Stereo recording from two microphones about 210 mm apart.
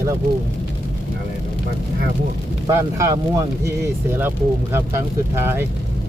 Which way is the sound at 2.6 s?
15° right (ahead or behind).